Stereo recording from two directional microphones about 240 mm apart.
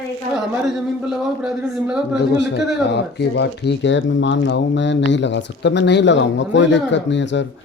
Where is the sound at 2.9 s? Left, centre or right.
Left.